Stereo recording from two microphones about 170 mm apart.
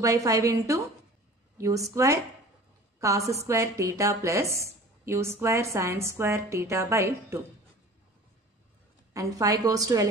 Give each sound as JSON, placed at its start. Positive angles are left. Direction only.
{"t": 0.0, "sound": "a woman's voice", "side_deg": -20}
{"t": 9.1, "sound": "a woman's voice", "side_deg": -20}